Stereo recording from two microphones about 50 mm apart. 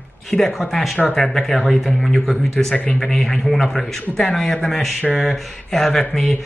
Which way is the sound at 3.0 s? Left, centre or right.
Centre.